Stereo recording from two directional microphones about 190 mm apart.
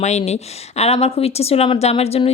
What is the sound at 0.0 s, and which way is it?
Speech, 35° left (ahead or behind).